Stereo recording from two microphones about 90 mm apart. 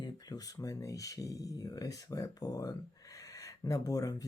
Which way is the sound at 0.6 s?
35° left (ahead or behind).